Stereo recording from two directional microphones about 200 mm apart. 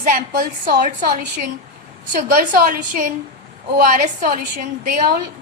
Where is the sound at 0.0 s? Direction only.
40° right (ahead or behind).